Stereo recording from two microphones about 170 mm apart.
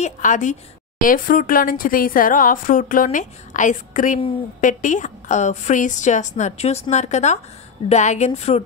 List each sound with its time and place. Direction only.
0.0 s a woman's voice: 45° left (ahead or behind)